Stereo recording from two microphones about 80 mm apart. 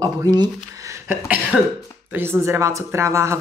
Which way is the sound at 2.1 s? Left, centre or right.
Right.